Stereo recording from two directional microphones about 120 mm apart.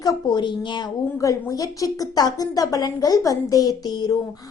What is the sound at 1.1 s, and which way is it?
A woman's voice, 30° left (ahead or behind).